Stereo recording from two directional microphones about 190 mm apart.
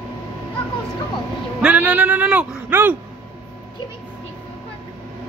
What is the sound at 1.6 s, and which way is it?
Speech, 5° right (ahead or behind).